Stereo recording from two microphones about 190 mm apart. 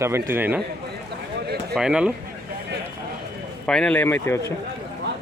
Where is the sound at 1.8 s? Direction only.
5° right (ahead or behind).